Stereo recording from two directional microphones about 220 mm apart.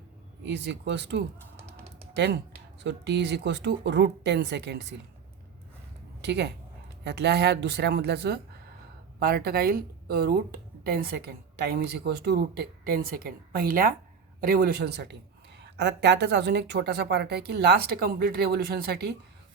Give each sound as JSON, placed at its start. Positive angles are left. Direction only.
{"t": 0.4, "sound": "speech", "side_deg": -55}
{"t": 6.2, "sound": "speech", "side_deg": -50}